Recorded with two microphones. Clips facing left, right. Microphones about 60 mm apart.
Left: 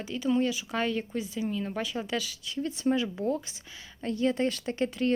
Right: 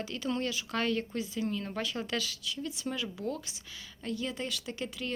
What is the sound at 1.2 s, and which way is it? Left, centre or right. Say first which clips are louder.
Speech: left 1 dB; left.